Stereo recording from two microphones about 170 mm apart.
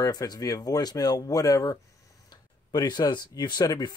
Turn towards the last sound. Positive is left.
turn(degrees=25)  # may be behind; listen again after turning